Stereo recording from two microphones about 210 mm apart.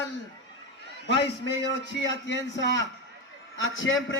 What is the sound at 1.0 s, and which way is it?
A man's voice, 55° left (ahead or behind).